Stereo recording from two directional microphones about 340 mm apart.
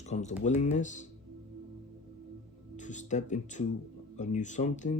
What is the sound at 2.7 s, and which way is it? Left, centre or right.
Speech, left.